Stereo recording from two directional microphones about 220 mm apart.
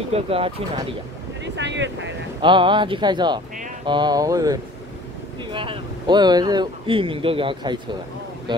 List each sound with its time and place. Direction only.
0.1 s speech: 25° right (ahead or behind)
1.4 s speech: 55° right (ahead or behind)
2.4 s speech: 20° right (ahead or behind)